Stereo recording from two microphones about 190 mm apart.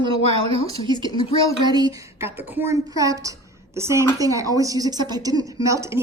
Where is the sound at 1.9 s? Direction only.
15° right (ahead or behind).